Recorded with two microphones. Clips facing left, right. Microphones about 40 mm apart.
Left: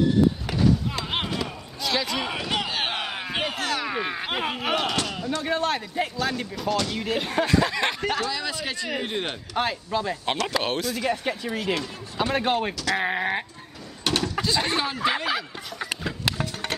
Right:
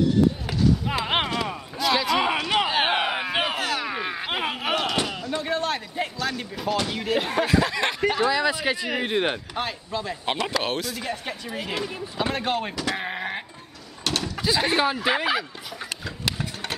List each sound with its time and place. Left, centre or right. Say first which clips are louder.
1.0 s clip-clop: right 4 dB; right
1.8 s a sound: right 4 dB; centre
2.4 s a sound: right 5 dB; centre
5.4 s speech: left 1 dB; centre
6.5 s speech: even; centre
8.2 s speech: right 6 dB; centre
9.6 s speech: left 3 dB; centre
11.5 s speech: right 1 dB; centre
12.4 s speech: left 2 dB; centre
14.0 s a sound: left 2 dB; centre
14.4 s speech: right 6 dB; centre
15.9 s a sound: left 5 dB; centre
16.3 s sewing machine: even; centre